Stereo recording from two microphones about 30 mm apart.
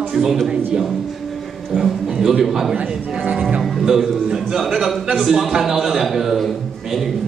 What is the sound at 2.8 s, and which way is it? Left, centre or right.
Speech, right.